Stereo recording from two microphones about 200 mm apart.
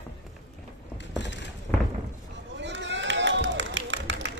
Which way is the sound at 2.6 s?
60° right (ahead or behind).